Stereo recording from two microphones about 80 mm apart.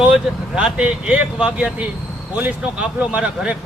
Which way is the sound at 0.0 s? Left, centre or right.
Centre.